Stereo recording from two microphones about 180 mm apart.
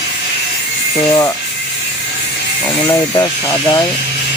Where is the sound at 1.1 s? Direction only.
20° left (ahead or behind).